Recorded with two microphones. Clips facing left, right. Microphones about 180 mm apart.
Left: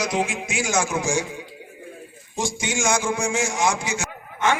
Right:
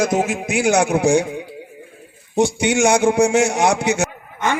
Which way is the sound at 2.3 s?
65° right (ahead or behind).